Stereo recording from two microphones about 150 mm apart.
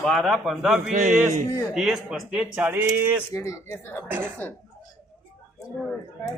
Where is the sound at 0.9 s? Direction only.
55° right (ahead or behind).